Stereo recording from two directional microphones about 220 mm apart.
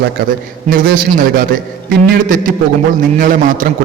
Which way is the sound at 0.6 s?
40° right (ahead or behind).